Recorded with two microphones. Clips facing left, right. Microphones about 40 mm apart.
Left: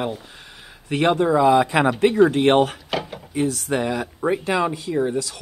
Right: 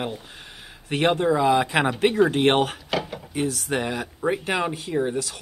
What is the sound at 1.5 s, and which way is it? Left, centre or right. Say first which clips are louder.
Speech: left 4 dB; right.